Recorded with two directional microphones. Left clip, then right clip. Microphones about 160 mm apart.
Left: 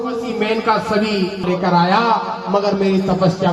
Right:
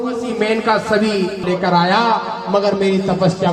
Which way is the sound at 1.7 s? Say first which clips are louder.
Even; 30° right (ahead or behind).